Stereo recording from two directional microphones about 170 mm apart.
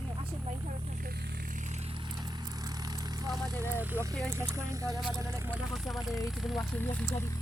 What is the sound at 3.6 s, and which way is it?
Speech, 15° right (ahead or behind).